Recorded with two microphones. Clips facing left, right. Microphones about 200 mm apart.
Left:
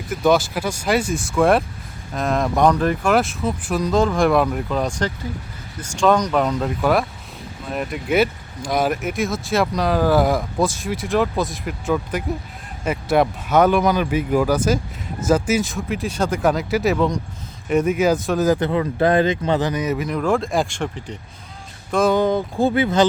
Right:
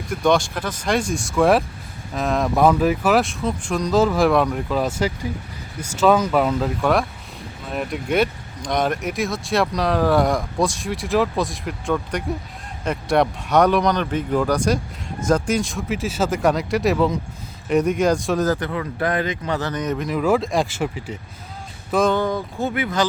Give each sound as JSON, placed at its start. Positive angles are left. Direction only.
{"t": 0.1, "sound": "speech", "side_deg": 5}
{"t": 18.5, "sound": "speech", "side_deg": 25}
{"t": 22.1, "sound": "speech", "side_deg": 20}